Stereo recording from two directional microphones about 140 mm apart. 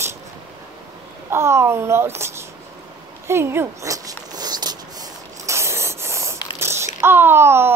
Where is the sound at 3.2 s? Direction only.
15° right (ahead or behind).